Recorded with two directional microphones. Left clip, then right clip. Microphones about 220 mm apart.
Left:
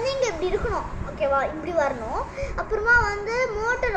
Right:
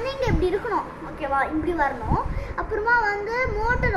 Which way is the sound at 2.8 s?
15° right (ahead or behind).